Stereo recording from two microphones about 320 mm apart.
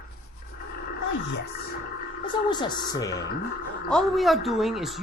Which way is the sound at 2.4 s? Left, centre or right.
Centre.